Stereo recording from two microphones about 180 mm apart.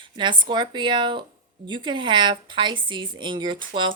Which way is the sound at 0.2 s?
25° right (ahead or behind).